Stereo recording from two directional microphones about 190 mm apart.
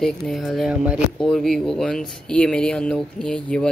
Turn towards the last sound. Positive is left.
turn(degrees=5)  # may be behind; listen again after turning